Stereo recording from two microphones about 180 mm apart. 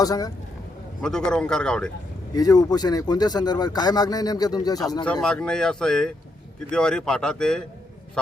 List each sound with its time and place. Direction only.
0.0 s speech: 20° left (ahead or behind)
1.0 s speech: 5° left (ahead or behind)
2.3 s speech: 20° left (ahead or behind)
5.2 s speech: 5° left (ahead or behind)